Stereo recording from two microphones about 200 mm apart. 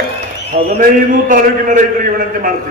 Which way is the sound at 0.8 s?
40° right (ahead or behind).